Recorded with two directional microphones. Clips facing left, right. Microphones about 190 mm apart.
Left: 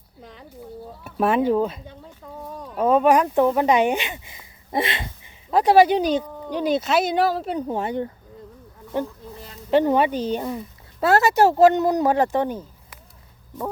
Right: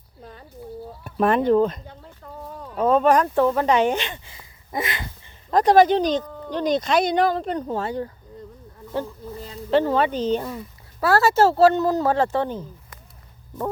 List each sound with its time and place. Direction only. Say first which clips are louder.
1.0 s speech: right 1 dB; 5° left (ahead or behind)
4.7 s speech: left 3 dB; 30° left (ahead or behind)
5.2 s speech: right 1 dB; 10° left (ahead or behind)
7.7 s speech: left 1 dB; 20° left (ahead or behind)
9.6 s speech: left 1 dB; 15° left (ahead or behind)